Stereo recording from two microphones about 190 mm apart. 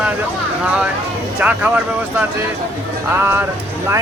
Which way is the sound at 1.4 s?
5° right (ahead or behind).